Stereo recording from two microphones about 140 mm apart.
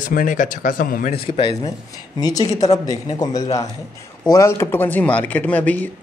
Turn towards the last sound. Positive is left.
turn(degrees=10)  # may be behind; listen again after turning